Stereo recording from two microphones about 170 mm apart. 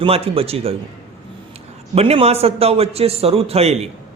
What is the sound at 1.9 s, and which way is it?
Speech, 35° right (ahead or behind).